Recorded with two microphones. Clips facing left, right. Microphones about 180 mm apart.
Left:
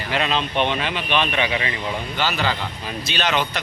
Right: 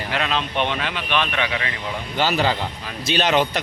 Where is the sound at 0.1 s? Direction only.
Centre (ahead or behind).